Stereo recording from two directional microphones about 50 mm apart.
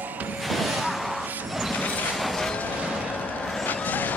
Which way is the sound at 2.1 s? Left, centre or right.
Centre.